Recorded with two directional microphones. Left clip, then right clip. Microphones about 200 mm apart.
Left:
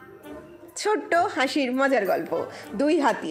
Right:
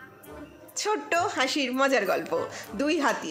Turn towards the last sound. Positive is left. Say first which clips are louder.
# left 4 dB
turn(degrees=10)  # may be behind; listen again after turning